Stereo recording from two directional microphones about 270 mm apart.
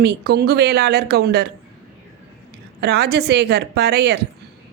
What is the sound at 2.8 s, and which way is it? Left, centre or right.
Speech, right.